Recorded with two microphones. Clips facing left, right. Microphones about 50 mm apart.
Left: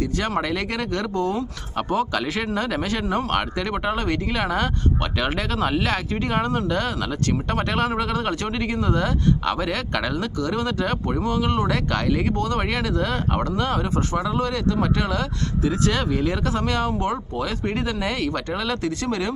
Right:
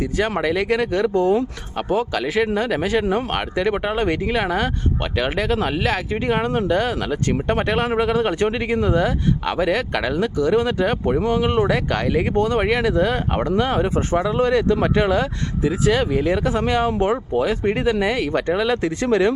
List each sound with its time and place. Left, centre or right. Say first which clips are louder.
0.0 s speech: right 3 dB; centre; by 15.3 s right
15.6 s speech: right 4 dB; centre